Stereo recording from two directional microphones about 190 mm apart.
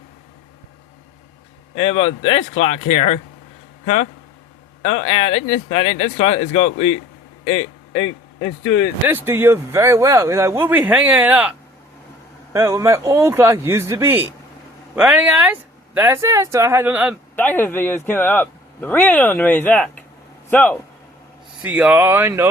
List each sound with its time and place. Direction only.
1.7 s speech: 30° left (ahead or behind)
7.4 s a sound: 30° left (ahead or behind)
9.0 s speech: 10° right (ahead or behind)
12.5 s speech: 15° right (ahead or behind)
17.3 s a man's voice: 10° left (ahead or behind)
21.6 s speech: 10° right (ahead or behind)